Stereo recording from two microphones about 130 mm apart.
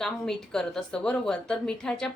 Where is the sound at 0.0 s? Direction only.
5° left (ahead or behind).